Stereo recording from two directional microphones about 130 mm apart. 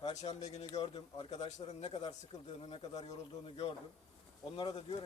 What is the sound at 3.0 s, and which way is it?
Speech, 55° left (ahead or behind).